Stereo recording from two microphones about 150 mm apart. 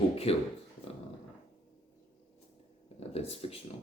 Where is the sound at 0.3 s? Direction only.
40° left (ahead or behind).